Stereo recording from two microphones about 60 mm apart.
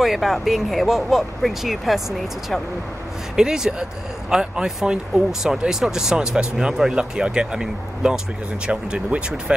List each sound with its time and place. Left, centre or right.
0.0 s speech: centre